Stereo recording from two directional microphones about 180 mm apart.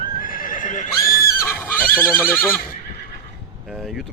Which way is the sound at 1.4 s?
10° left (ahead or behind).